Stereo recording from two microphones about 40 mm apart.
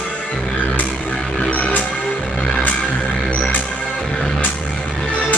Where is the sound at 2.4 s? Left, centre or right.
Centre.